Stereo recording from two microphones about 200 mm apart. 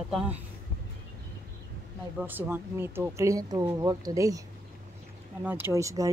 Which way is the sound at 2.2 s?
10° right (ahead or behind).